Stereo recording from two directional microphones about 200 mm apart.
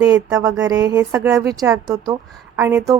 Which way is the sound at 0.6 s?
20° right (ahead or behind).